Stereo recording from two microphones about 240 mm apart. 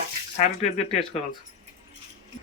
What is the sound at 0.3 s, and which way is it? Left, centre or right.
Speech, left.